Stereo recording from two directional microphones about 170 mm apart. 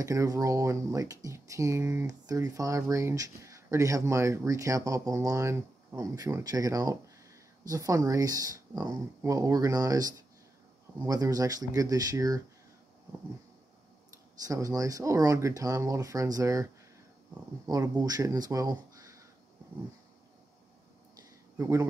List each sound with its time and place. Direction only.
0.0 s speech: 20° right (ahead or behind)
14.4 s speech: 20° right (ahead or behind)
17.6 s speech: 20° right (ahead or behind)
21.2 s a sound: 20° right (ahead or behind)